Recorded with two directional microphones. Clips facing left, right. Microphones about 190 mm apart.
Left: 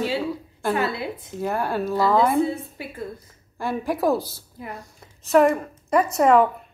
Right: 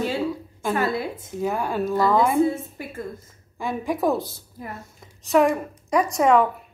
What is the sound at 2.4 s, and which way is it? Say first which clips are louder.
Speech: right 2 dB; 45° right (ahead or behind).